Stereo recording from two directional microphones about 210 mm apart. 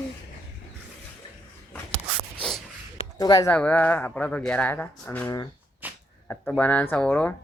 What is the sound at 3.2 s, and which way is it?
Speech, 15° left (ahead or behind).